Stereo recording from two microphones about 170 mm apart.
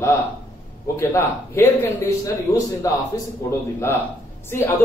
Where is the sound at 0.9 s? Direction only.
15° left (ahead or behind).